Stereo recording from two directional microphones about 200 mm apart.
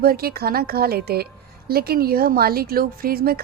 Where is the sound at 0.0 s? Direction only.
50° right (ahead or behind).